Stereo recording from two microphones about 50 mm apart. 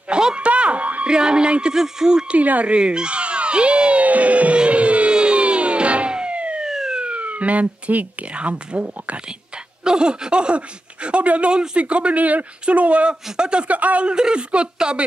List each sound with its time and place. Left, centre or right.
0.1 s a sound: centre
0.5 s music: right
1.1 s speech: centre
2.3 s a sound: right
6.6 s emergency vehicle: centre
7.0 s speech: right
9.8 s speech: centre
14.1 s speech: centre